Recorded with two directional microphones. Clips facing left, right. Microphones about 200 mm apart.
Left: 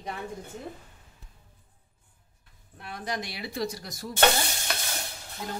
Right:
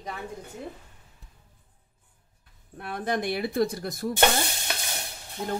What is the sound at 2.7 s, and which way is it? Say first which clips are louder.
Speech: right 5 dB; 55° right (ahead or behind).